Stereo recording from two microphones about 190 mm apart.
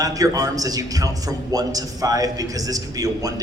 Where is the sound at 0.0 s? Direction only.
20° right (ahead or behind).